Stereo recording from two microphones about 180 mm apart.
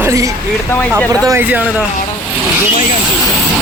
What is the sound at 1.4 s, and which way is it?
Speech, 10° right (ahead or behind).